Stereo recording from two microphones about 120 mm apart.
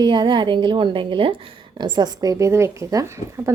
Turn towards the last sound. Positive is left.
turn(degrees=-25)  # may be behind; listen again after turning